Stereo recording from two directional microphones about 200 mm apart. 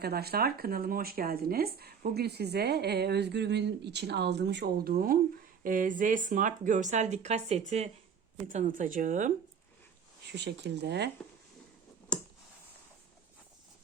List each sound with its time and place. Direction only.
0.0 s speech: 50° right (ahead or behind)
10.3 s speech: 60° right (ahead or behind)